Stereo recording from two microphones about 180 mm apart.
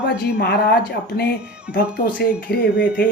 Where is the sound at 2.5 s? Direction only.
60° left (ahead or behind).